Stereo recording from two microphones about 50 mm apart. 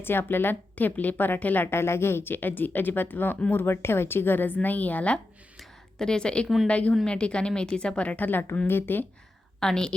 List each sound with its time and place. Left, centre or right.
0.0 s a woman's voice: left
1.6 s speech: left
3.5 s speech: left
6.0 s a woman's voice: centre; by 9.0 s left
9.6 s a woman's voice: centre